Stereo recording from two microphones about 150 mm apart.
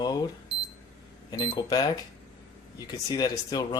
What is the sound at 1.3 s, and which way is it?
Speech, 25° left (ahead or behind).